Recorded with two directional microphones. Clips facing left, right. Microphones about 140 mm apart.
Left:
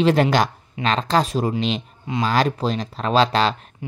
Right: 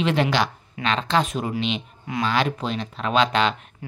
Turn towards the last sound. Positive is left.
turn(degrees=35)  # may be behind; listen again after turning